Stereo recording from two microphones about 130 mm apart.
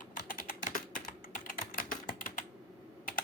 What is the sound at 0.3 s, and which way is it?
Typing, 90° left.